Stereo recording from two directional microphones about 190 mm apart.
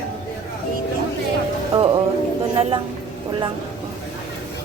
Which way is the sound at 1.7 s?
25° right (ahead or behind).